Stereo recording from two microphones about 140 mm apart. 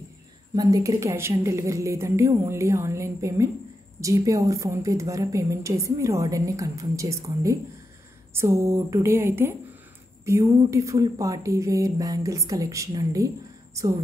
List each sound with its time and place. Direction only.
0.6 s a woman's voice: 25° right (ahead or behind)